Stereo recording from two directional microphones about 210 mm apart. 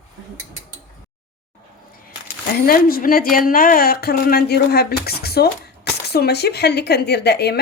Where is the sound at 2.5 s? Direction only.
45° left (ahead or behind).